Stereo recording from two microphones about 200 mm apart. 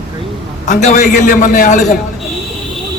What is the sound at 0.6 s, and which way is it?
A man's voice, 35° left (ahead or behind).